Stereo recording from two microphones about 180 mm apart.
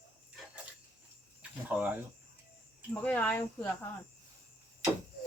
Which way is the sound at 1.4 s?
10° right (ahead or behind).